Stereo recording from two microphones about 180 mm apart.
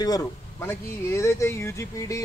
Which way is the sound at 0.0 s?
20° left (ahead or behind).